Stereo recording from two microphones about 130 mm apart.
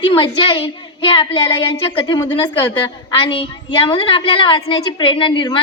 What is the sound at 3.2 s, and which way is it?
A woman's voice, 40° left (ahead or behind).